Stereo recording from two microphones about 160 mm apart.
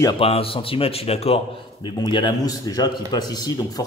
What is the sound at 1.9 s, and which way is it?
Speech, 30° left (ahead or behind).